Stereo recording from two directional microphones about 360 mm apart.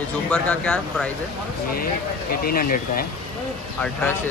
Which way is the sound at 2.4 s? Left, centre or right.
Left.